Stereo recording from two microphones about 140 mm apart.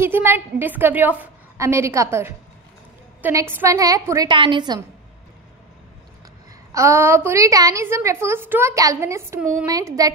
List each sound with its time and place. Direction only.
0.0 s a woman's voice: 15° right (ahead or behind); by 4.7 s 35° right (ahead or behind)
6.7 s a woman's voice: 20° right (ahead or behind)